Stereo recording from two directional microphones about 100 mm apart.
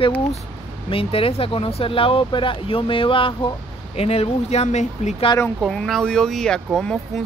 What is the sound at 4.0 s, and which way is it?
Speech, 90° left.